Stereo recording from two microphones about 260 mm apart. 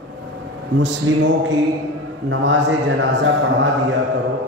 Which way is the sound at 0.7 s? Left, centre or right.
Right.